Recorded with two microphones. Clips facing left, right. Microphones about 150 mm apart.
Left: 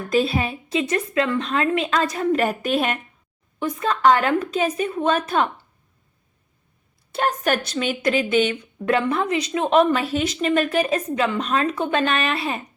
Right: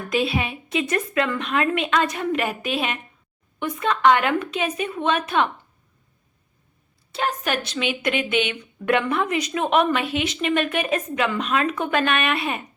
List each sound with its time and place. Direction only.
0.1 s speech: 40° left (ahead or behind)
3.6 s speech: 35° left (ahead or behind)
7.1 s speech: 45° left (ahead or behind); by 12.6 s 30° left (ahead or behind)